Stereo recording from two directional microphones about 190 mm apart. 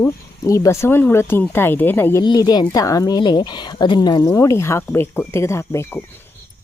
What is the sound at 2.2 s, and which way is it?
A woman's voice, 20° left (ahead or behind).